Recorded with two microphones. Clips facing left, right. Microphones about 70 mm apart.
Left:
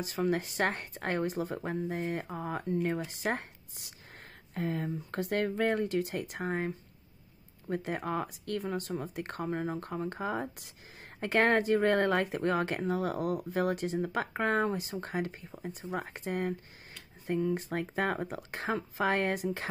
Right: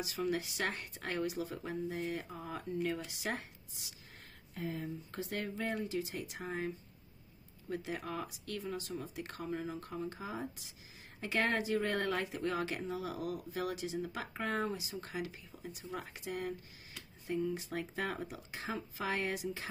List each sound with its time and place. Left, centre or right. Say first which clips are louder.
0.0 s speech: left 5 dB; left
17.3 s speech: left 5 dB; left